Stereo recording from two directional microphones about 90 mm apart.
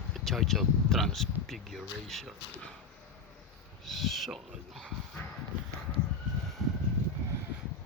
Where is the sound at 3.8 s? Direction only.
Centre (ahead or behind).